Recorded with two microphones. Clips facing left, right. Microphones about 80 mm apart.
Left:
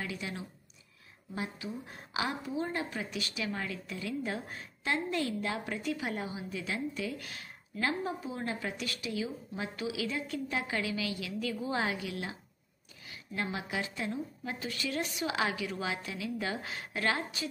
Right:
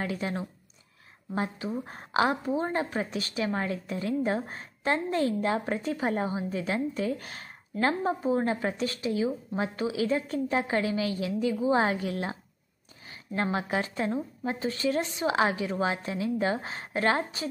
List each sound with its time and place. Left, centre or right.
0.0 s a woman's voice: right
11.3 s a woman's voice: right